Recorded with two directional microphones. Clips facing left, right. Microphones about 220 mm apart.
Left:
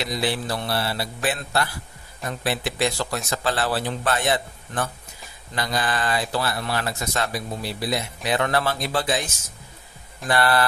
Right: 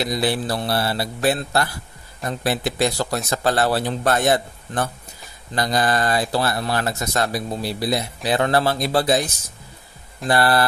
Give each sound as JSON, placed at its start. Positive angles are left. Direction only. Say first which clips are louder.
{"t": 0.0, "sound": "speech", "louder": "right 4 dB", "side_deg": -40}